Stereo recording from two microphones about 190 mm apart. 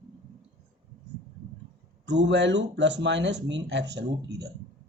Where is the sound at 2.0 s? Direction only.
65° right (ahead or behind).